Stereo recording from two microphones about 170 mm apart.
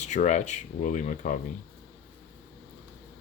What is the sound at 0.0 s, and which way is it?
Speech, 45° left (ahead or behind).